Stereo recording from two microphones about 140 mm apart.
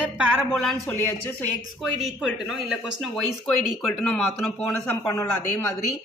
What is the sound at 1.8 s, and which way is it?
Speech, 5° right (ahead or behind).